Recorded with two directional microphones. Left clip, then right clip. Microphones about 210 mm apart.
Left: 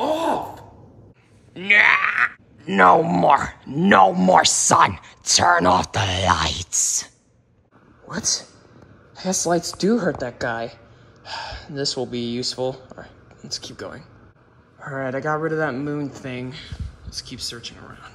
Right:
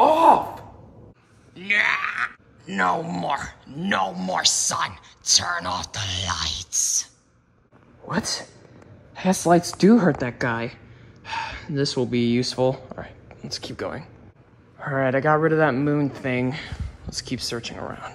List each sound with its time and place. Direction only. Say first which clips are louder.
0.0 s sigh: right 6 dB; 20° right (ahead or behind)
1.5 s speech: left 6 dB; 10° right (ahead or behind)
8.1 s speech: left 2 dB; 10° right (ahead or behind)
9.2 s speech: right 3 dB; 10° left (ahead or behind)